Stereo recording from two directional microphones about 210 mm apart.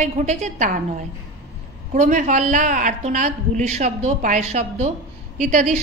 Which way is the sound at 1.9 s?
35° right (ahead or behind).